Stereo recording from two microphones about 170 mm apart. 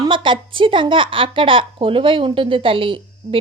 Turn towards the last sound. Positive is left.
turn(degrees=-30)  # may be behind; listen again after turning